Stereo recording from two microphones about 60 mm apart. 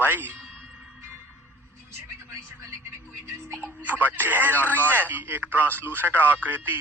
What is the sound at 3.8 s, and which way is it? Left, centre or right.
A man's voice, right.